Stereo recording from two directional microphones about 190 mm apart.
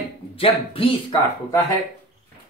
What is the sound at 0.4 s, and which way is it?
Speech, 30° left (ahead or behind).